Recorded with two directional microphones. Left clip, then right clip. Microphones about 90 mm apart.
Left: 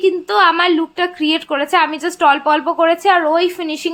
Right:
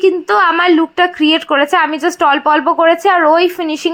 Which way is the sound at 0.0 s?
35° right (ahead or behind).